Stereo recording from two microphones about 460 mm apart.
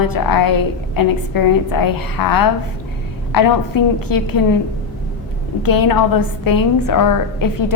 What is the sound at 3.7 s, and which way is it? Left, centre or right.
Speech, left.